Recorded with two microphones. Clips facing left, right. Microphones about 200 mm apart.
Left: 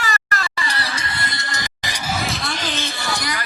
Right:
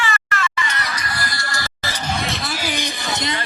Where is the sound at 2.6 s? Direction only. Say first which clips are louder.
Right 2 dB; 15° right (ahead or behind).